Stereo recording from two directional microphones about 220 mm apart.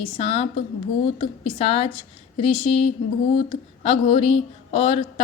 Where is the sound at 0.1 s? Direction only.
25° left (ahead or behind).